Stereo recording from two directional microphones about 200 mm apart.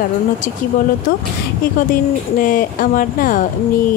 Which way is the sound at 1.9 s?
45° left (ahead or behind).